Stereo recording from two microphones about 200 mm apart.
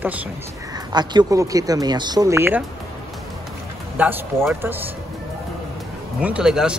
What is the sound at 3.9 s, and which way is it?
Speech, 10° right (ahead or behind).